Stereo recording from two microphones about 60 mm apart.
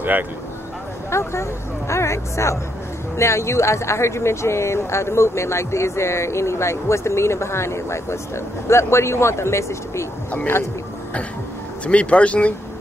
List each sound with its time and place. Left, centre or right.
1.1 s speech: left
11.8 s speech: centre